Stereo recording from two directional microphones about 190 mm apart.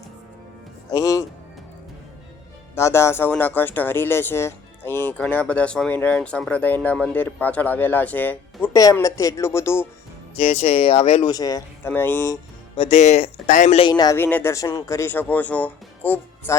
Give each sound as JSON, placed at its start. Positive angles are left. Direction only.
{"t": 0.9, "sound": "music", "side_deg": 15}
{"t": 2.7, "sound": "speech", "side_deg": 15}
{"t": 10.3, "sound": "speech", "side_deg": 35}
{"t": 11.3, "sound": "speech", "side_deg": 20}